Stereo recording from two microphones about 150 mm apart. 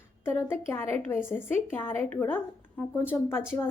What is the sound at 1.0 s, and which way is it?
A woman's voice, 15° left (ahead or behind).